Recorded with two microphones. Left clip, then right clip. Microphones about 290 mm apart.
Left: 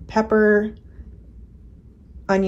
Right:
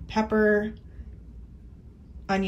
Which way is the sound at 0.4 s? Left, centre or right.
Left.